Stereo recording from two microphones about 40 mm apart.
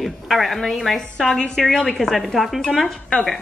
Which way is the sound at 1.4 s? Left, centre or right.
Left.